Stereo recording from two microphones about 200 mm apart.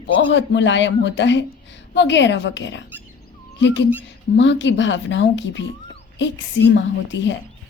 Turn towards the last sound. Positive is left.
turn(degrees=65)  # may be behind; listen again after turning